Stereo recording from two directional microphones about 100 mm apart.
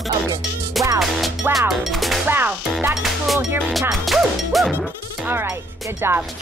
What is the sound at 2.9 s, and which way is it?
Speech, 5° right (ahead or behind).